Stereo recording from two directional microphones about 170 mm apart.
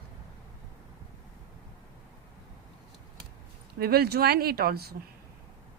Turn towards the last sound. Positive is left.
turn(degrees=-65)  # may be behind; listen again after turning